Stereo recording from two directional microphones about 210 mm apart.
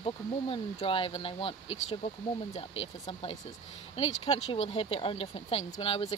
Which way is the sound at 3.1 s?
25° left (ahead or behind).